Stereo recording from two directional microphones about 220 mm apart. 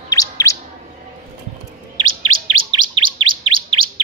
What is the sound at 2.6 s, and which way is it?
Chirp, 20° right (ahead or behind).